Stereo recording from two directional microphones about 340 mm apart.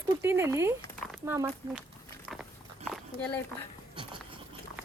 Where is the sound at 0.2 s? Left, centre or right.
Centre.